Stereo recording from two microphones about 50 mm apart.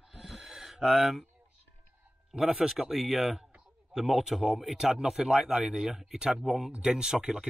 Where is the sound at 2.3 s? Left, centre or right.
Centre.